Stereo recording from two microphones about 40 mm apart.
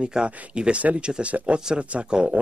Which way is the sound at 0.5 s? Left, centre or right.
Right.